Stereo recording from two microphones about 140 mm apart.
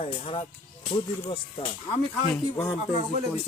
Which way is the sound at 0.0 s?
45° left (ahead or behind).